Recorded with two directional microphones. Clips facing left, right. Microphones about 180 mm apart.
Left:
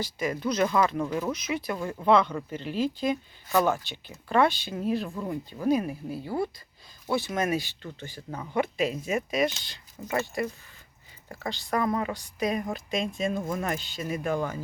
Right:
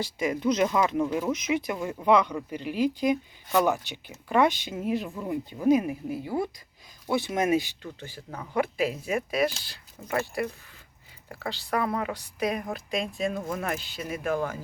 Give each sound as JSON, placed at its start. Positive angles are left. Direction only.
{"t": 0.0, "sound": "speech", "side_deg": -25}
{"t": 1.3, "sound": "speech", "side_deg": -20}
{"t": 7.9, "sound": "speech", "side_deg": -5}